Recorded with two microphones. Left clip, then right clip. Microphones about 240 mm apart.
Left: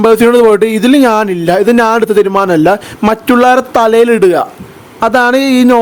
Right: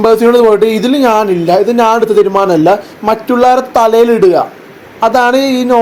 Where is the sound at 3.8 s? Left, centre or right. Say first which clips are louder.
Right 1 dB; left.